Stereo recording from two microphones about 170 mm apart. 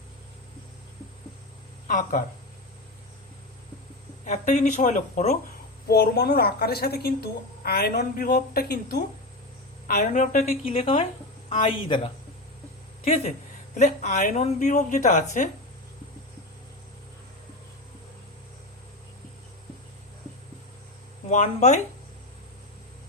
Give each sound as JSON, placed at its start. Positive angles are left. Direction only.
{"t": 1.9, "sound": "speech", "side_deg": 50}
{"t": 4.3, "sound": "speech", "side_deg": 45}
{"t": 5.9, "sound": "a woman's voice", "side_deg": 70}
{"t": 9.8, "sound": "a woman's voice", "side_deg": 55}
{"t": 21.2, "sound": "speech", "side_deg": 40}